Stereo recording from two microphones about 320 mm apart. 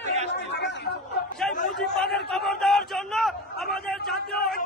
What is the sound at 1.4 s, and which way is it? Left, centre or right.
Chatter, centre.